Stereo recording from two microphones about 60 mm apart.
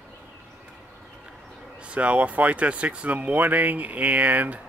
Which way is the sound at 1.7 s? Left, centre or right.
Right.